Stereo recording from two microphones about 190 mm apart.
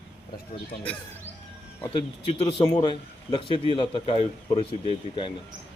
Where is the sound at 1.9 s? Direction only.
30° left (ahead or behind).